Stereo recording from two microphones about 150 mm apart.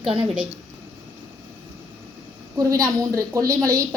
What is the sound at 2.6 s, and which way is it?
A woman's voice, 20° right (ahead or behind).